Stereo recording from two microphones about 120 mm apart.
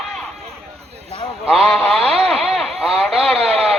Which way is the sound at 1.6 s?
10° left (ahead or behind).